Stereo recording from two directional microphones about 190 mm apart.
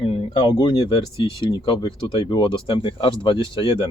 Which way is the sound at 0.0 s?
25° left (ahead or behind).